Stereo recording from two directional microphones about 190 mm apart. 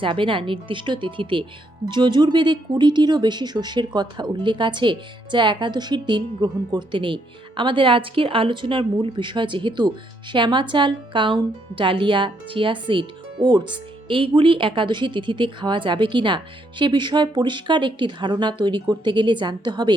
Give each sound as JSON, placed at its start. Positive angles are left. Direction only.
{"t": 0.0, "sound": "speech", "side_deg": -25}